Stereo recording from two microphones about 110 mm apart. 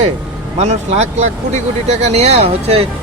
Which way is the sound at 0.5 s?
90° right.